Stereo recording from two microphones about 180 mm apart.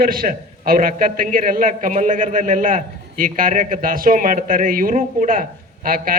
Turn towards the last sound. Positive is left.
turn(degrees=-50)  # may be behind; listen again after turning